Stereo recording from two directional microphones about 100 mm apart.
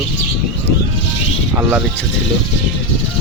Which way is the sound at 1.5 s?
20° right (ahead or behind).